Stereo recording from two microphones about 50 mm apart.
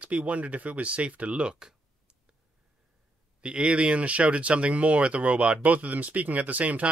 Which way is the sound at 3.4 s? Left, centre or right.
Right.